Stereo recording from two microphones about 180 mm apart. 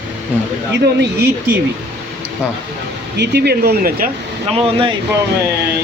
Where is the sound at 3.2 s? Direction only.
70° right (ahead or behind).